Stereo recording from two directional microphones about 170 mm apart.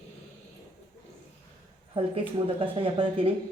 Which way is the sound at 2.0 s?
30° right (ahead or behind).